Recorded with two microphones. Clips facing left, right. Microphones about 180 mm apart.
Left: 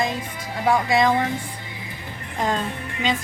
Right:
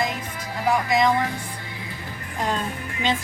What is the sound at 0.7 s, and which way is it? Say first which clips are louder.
Speech: left 2 dB; 25° left (ahead or behind).